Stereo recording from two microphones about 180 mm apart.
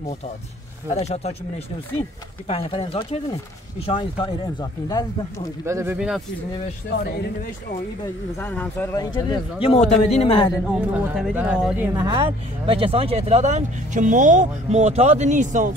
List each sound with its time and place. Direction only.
0.9 s a man's voice: 35° left (ahead or behind)
5.7 s speech: 15° right (ahead or behind)
5.9 s speech: 5° right (ahead or behind)
8.4 s speech: 10° left (ahead or behind)
8.9 s a man's voice: 20° left (ahead or behind)
10.7 s speech: 5° right (ahead or behind)
12.2 s speech: 30° right (ahead or behind)